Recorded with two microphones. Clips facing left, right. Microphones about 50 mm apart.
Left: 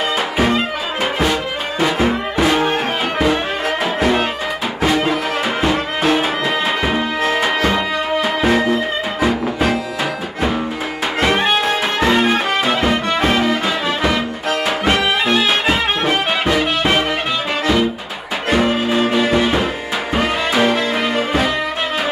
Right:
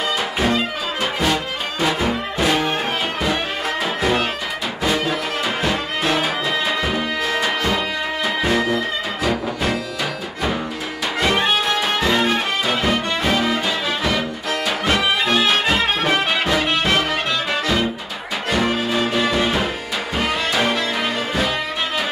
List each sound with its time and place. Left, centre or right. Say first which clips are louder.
2.0 s music: left 4 dB; left
5.6 s music: left 4 dB; left
6.8 s music: left 4 dB; left
7.7 s music: left 4 dB; left
11.1 s music: left 3 dB; left
15.6 s music: left 2 dB; centre
18.6 s music: left 3 dB; left